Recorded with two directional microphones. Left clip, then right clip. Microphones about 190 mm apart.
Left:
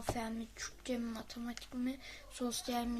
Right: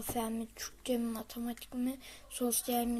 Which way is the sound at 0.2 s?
20° right (ahead or behind).